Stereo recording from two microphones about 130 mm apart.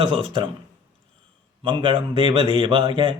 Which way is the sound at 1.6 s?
40° right (ahead or behind).